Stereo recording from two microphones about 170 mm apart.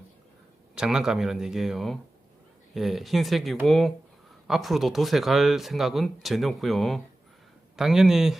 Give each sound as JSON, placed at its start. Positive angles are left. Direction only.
{"t": 0.8, "sound": "speech", "side_deg": -5}